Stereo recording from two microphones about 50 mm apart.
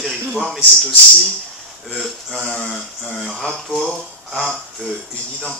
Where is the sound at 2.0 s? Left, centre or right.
Centre.